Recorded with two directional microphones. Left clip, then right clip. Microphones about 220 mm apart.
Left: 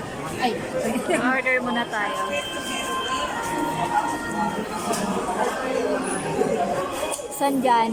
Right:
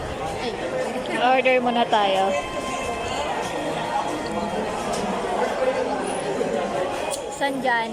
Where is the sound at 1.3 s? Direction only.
5° right (ahead or behind).